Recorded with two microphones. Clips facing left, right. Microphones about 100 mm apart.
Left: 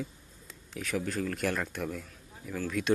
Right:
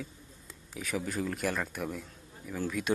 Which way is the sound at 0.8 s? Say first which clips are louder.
Left 1 dB; 5° right (ahead or behind).